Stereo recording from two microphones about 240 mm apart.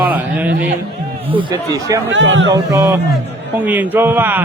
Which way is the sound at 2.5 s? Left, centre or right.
Centre.